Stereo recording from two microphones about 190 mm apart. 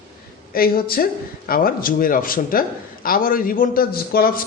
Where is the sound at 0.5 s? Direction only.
50° left (ahead or behind).